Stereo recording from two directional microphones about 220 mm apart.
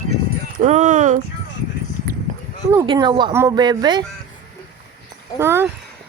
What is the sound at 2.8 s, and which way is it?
Speech, 20° right (ahead or behind).